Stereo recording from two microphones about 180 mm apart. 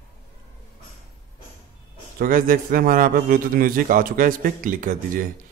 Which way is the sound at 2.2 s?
50° right (ahead or behind).